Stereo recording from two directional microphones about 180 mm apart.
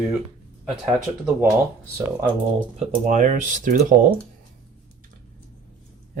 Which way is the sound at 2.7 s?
45° right (ahead or behind).